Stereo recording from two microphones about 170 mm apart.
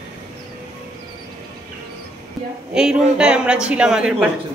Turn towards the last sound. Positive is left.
turn(degrees=-5)  # may be behind; listen again after turning